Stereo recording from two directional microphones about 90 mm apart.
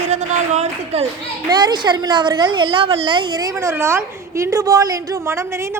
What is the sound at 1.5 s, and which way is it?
A woman's voice, 50° right (ahead or behind).